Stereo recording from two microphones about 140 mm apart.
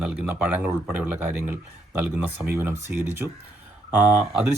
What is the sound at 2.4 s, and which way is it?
Speech, 15° right (ahead or behind).